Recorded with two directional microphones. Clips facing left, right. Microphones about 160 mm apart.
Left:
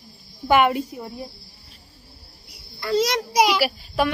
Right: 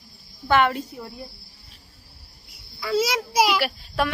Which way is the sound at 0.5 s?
10° left (ahead or behind).